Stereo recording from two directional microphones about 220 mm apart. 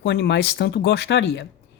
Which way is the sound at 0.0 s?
55° left (ahead or behind).